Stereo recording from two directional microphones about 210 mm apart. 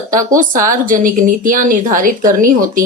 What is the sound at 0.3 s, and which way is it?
A woman's voice, 40° right (ahead or behind).